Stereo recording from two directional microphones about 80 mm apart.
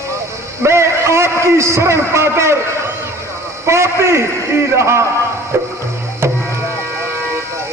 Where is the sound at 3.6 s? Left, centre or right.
Right.